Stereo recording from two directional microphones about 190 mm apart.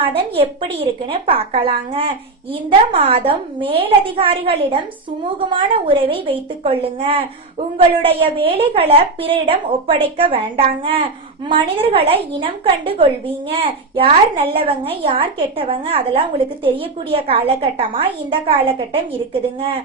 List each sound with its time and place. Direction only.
0.0 s a woman's voice: 30° right (ahead or behind)